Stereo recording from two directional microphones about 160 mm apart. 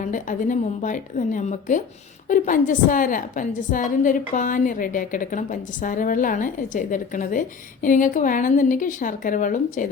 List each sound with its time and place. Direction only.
0.0 s a woman's voice: 55° left (ahead or behind)